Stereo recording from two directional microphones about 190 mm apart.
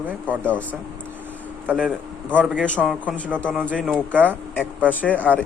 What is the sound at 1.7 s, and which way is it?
Speech, 5° right (ahead or behind).